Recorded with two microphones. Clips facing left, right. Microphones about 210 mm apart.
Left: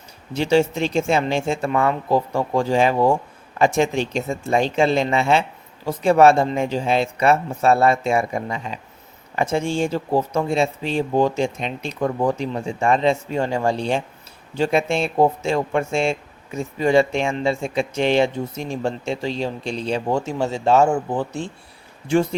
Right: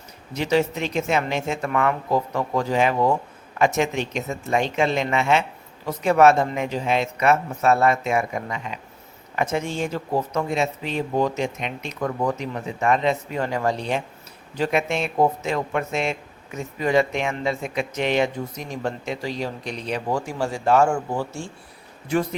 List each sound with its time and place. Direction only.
0.3 s speech: 30° left (ahead or behind)